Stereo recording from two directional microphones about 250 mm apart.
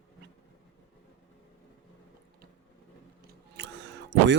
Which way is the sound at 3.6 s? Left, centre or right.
Right.